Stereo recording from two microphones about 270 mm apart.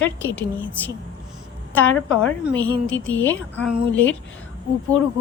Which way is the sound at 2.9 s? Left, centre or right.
Left.